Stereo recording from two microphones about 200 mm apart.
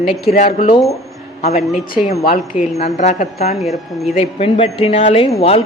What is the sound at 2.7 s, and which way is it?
Speech, 35° left (ahead or behind).